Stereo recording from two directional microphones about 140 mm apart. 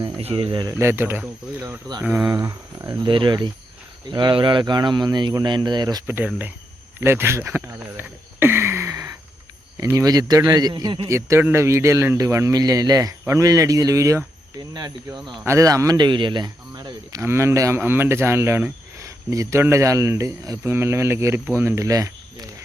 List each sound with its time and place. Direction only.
0.2 s speech: 45° right (ahead or behind)
0.7 s speech: 20° right (ahead or behind)
3.1 s speech: 35° right (ahead or behind)
6.1 s speech: 15° right (ahead or behind)
7.0 s a sound: 15° right (ahead or behind)
9.7 s speech: 20° right (ahead or behind)